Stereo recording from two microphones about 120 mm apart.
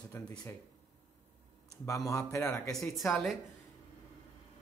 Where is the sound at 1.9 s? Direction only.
25° left (ahead or behind).